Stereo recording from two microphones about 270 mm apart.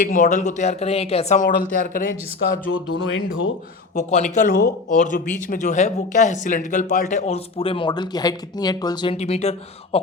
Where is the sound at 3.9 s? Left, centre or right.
Left.